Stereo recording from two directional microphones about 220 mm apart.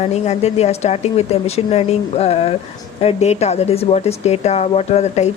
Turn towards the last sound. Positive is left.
turn(degrees=30)  # may be behind; listen again after turning